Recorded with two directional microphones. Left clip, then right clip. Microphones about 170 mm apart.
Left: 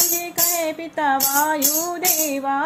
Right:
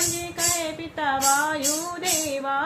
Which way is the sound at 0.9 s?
45° left (ahead or behind).